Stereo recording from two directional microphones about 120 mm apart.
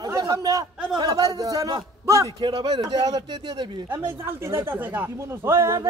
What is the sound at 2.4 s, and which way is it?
A man's voice, 40° right (ahead or behind).